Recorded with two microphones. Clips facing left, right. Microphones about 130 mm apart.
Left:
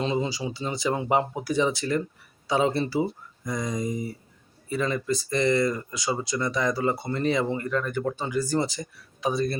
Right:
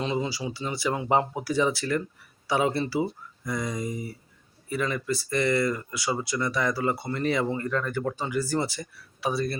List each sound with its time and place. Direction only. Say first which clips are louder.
0.0 s speech: left 2 dB; 25° left (ahead or behind)